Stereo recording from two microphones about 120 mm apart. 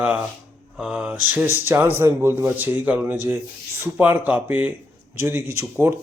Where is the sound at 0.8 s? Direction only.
10° right (ahead or behind).